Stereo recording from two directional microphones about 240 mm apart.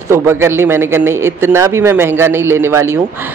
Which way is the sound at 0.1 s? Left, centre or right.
Centre.